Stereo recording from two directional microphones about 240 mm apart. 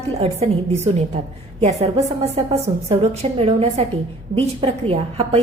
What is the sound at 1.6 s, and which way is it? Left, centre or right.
A woman's voice, right.